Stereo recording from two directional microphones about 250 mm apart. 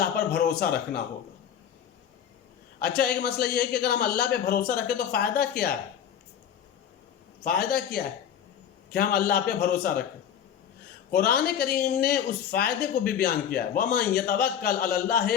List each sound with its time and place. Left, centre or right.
0.0 s speech: left
2.7 s speech: left
7.4 s speech: left
11.1 s speech: left